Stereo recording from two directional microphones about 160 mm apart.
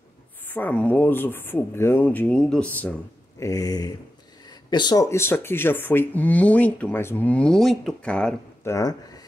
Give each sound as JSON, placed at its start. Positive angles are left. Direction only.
{"t": 0.5, "sound": "speech", "side_deg": 10}
{"t": 3.4, "sound": "a sound", "side_deg": 20}
{"t": 4.5, "sound": "speech", "side_deg": 25}
{"t": 8.6, "sound": "speech", "side_deg": 20}